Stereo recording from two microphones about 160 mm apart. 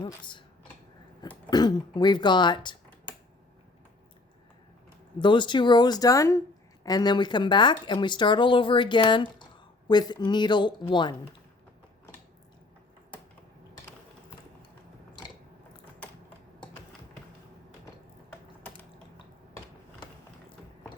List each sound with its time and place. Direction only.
0.0 s speech: 30° left (ahead or behind)
1.5 s speech: 25° left (ahead or behind)
5.2 s speech: 30° left (ahead or behind)